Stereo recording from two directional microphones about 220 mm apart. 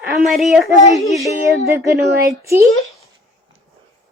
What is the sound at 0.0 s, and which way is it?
Speech, centre (ahead or behind).